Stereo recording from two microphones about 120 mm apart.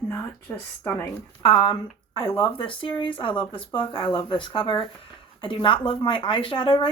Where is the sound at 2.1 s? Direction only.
50° left (ahead or behind).